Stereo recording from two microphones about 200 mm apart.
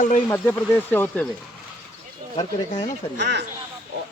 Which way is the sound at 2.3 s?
20° left (ahead or behind).